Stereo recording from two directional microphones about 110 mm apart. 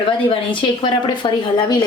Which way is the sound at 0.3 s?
50° left (ahead or behind).